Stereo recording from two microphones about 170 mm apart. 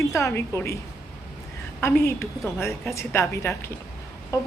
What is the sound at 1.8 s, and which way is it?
A woman's voice, 15° left (ahead or behind).